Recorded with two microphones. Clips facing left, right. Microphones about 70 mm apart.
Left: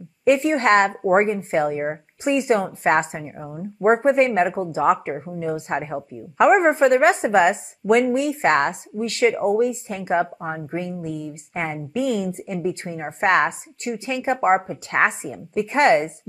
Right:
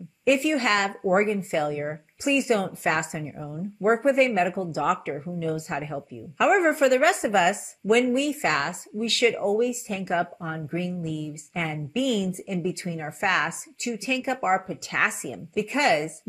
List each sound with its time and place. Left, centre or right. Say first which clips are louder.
0.2 s speech: left 4 dB; left